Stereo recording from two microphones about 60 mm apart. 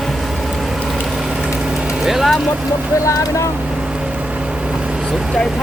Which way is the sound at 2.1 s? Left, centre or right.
Centre.